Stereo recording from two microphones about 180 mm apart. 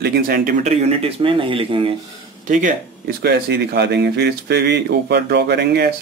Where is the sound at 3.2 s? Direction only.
65° right (ahead or behind).